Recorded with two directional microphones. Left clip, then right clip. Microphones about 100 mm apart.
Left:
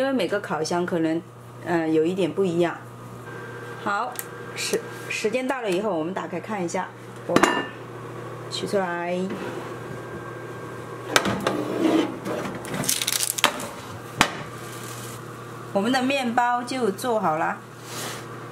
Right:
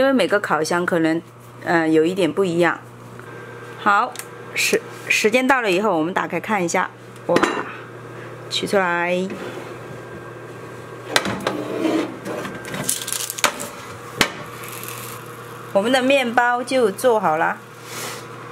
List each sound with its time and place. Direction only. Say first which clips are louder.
0.0 s speech: right 7 dB; 50° right (ahead or behind)
3.8 s a woman's voice: right 9 dB; 35° right (ahead or behind)
8.5 s speech: right 6 dB; 45° right (ahead or behind)
11.1 s a sound: right 1 dB; 15° left (ahead or behind)
13.4 s a sound: right 2 dB; 20° left (ahead or behind)
15.7 s a woman's voice: right 7 dB; 40° right (ahead or behind)